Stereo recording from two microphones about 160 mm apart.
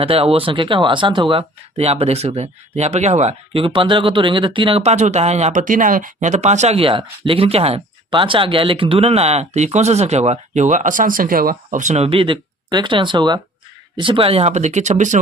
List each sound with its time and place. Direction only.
0.0 s speech: 35° right (ahead or behind)